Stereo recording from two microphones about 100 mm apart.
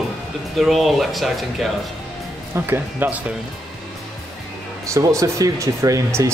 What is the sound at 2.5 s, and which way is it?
Speech, 25° right (ahead or behind).